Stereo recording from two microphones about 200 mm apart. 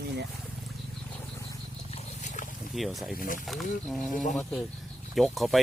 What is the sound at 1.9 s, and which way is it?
Roaring cats, 35° left (ahead or behind).